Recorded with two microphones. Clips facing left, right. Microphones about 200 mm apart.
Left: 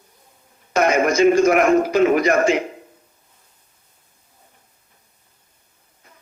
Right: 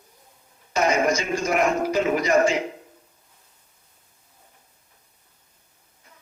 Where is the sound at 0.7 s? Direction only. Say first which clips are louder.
Left 4 dB; 60° left (ahead or behind).